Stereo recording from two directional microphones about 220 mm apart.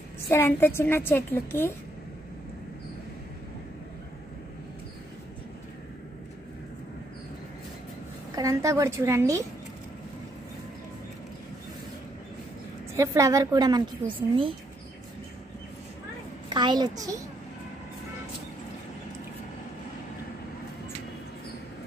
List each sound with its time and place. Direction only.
0.3 s a woman's voice: 10° left (ahead or behind)
8.4 s a woman's voice: 15° right (ahead or behind)
12.9 s a woman's voice: 15° right (ahead or behind)
16.4 s a child's voice: 20° right (ahead or behind)